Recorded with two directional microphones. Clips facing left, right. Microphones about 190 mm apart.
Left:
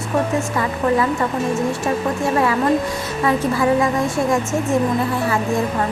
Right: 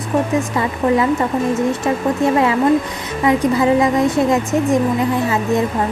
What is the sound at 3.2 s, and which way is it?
A woman's voice, 15° right (ahead or behind).